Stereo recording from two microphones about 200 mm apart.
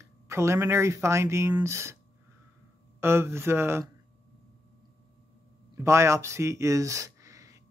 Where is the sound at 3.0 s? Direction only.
10° right (ahead or behind).